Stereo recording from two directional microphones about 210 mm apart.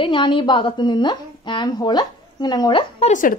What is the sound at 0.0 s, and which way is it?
A woman's voice, 25° left (ahead or behind).